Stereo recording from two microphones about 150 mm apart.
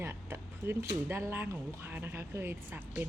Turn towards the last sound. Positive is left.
turn(degrees=-15)  # may be behind; listen again after turning